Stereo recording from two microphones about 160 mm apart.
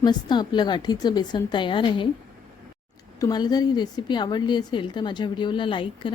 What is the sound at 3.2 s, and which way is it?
A woman's voice, 25° left (ahead or behind).